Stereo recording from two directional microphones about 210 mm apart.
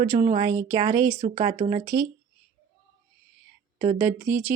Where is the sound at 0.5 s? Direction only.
15° right (ahead or behind).